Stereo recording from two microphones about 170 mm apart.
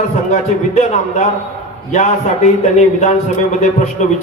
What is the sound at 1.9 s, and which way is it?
A man's voice, 45° left (ahead or behind).